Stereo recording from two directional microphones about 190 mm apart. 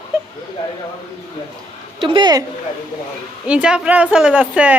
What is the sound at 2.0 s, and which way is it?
Speech, 25° right (ahead or behind).